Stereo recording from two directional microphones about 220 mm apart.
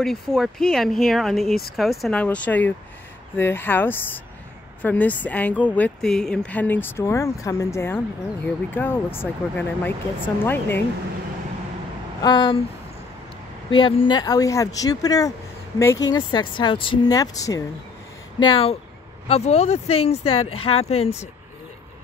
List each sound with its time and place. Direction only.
0.0 s speech: centre (ahead or behind)
12.2 s speech: 20° left (ahead or behind)
13.7 s speech: 25° left (ahead or behind)